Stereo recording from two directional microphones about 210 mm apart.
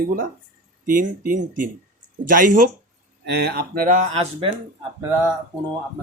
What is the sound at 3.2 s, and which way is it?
Speech, 50° right (ahead or behind).